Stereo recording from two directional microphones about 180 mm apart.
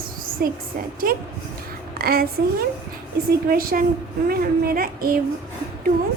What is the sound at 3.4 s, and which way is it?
A woman's voice, 55° right (ahead or behind).